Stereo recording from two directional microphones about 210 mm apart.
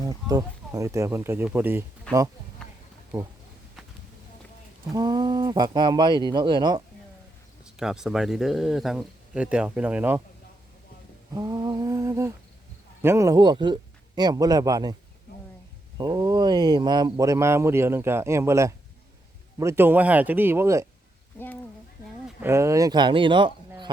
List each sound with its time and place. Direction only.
0.0 s speech: 15° right (ahead or behind)
4.9 s speech: 20° right (ahead or behind)
7.6 s speech: centre (ahead or behind)
11.3 s speech: 20° right (ahead or behind)
16.0 s speech: 20° right (ahead or behind)
21.3 s speech: 10° left (ahead or behind)
22.4 s speech: 10° right (ahead or behind)